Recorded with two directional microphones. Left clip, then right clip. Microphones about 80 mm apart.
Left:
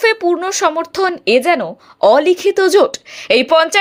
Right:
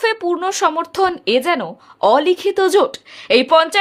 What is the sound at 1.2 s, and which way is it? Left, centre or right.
A woman's voice, left.